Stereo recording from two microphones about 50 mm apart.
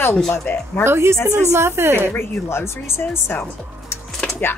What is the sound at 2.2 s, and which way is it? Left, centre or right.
Speech, left.